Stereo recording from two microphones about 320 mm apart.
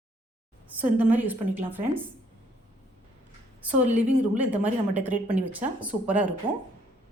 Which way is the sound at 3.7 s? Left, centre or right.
Right.